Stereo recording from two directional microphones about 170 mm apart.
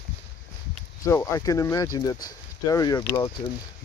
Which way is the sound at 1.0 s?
15° left (ahead or behind).